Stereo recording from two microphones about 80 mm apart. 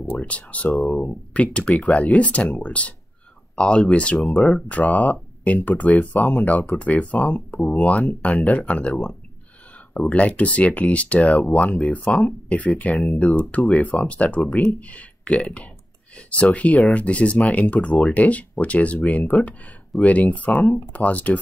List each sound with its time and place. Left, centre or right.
0.0 s speech: centre